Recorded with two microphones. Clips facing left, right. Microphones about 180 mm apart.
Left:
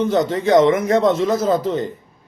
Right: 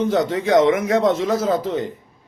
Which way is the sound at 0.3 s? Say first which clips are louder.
Left 3 dB; 10° right (ahead or behind).